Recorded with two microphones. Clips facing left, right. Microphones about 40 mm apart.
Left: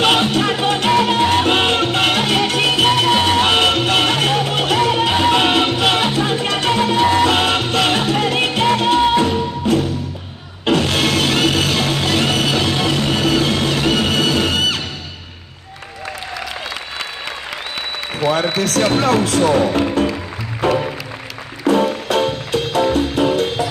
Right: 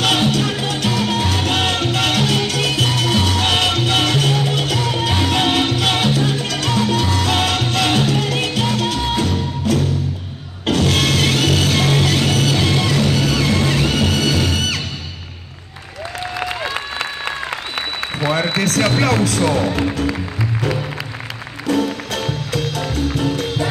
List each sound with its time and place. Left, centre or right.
0.0 s music: left
18.7 s music: left